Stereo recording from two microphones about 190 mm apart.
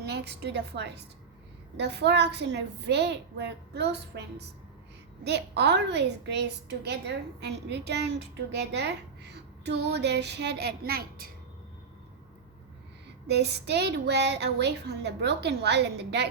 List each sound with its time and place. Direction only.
0.0 s a woman's voice: 60° right (ahead or behind)
13.2 s a woman's voice: 60° right (ahead or behind)